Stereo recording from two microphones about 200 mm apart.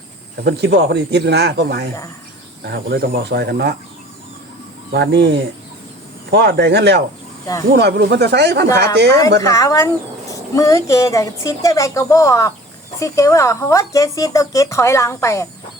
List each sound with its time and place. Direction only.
0.4 s speech: 55° right (ahead or behind)
4.9 s speech: 60° right (ahead or behind)
9.4 s speech: 15° left (ahead or behind)